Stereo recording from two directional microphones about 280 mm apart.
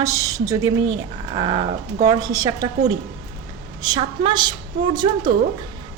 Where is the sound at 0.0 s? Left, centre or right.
Centre.